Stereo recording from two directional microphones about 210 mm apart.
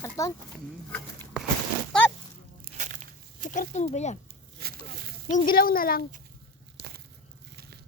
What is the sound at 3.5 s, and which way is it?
Speech, 35° left (ahead or behind).